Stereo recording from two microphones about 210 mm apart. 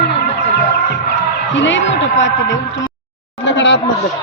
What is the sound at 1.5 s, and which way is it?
A man's voice, 60° left (ahead or behind).